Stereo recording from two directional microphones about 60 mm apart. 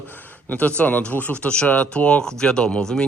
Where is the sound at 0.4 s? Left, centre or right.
Left.